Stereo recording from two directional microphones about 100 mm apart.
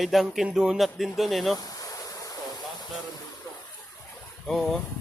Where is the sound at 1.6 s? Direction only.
40° left (ahead or behind).